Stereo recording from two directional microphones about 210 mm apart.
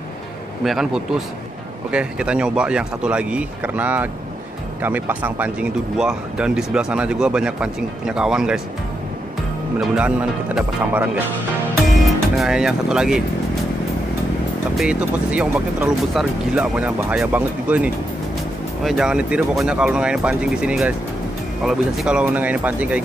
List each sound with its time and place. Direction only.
0.7 s speech: centre (ahead or behind)
9.8 s speech: 5° right (ahead or behind)
14.8 s speech: 5° right (ahead or behind)